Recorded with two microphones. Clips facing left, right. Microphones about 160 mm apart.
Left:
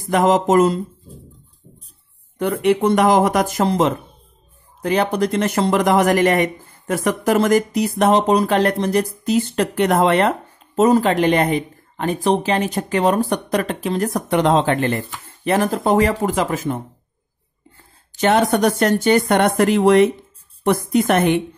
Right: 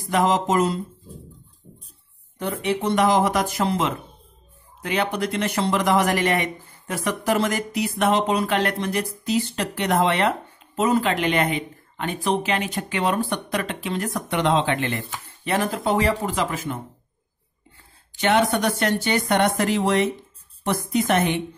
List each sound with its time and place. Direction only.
0.1 s speech: 50° left (ahead or behind)
2.3 s speech: 55° left (ahead or behind)